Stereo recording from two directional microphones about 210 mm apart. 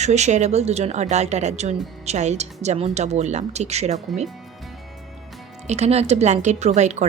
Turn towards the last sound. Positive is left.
turn(degrees=-35)  # may be behind; listen again after turning